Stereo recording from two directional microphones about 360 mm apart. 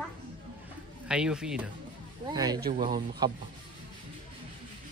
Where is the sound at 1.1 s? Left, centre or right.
Centre.